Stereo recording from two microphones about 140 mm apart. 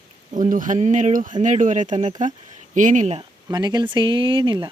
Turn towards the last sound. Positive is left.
turn(degrees=-35)  # may be behind; listen again after turning